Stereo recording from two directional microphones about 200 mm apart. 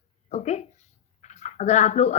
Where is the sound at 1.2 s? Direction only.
35° left (ahead or behind).